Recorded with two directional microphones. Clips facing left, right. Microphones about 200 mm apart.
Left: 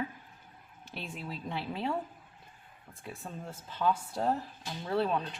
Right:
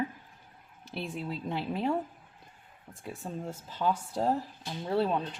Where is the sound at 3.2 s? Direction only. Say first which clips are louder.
Right 6 dB; 20° right (ahead or behind).